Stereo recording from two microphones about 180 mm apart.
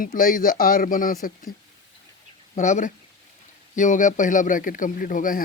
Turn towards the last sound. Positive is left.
turn(degrees=50)  # may be behind; listen again after turning